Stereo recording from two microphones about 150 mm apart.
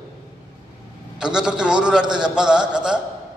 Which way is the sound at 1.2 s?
5° right (ahead or behind).